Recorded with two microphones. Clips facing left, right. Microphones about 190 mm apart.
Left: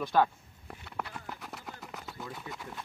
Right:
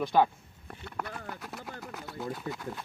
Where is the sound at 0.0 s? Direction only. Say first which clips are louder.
Right 2 dB; 15° right (ahead or behind).